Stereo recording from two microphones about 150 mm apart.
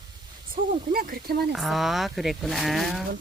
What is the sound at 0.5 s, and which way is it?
Speech, 75° right (ahead or behind).